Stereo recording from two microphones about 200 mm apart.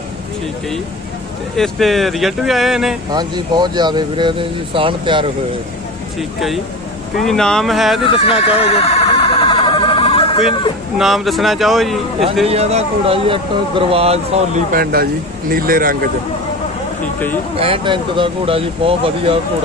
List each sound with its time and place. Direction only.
1.6 s speech: centre (ahead or behind)
3.1 s speech: 20° right (ahead or behind)
6.1 s speech: centre (ahead or behind)
8.0 s chicken: 25° left (ahead or behind)
11.0 s speech: centre (ahead or behind)
12.4 s a man's voice: 30° right (ahead or behind)
14.7 s speech: 50° right (ahead or behind)
17.6 s speech: 30° right (ahead or behind)